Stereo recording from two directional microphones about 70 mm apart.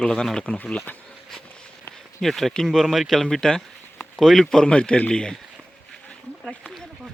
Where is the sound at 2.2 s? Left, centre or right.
Centre.